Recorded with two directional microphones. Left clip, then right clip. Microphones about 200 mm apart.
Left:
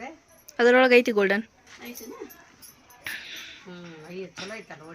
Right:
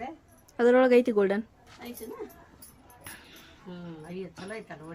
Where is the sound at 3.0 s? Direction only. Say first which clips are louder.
Left 13 dB; 5° right (ahead or behind).